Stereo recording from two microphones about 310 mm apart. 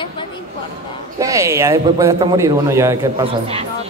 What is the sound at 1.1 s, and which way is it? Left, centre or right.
A man's voice, centre.